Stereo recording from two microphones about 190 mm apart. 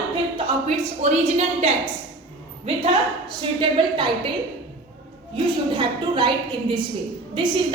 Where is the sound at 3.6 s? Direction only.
25° right (ahead or behind).